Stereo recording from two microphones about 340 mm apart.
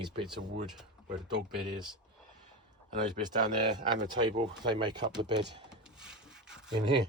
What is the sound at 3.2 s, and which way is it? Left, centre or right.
Speech, centre.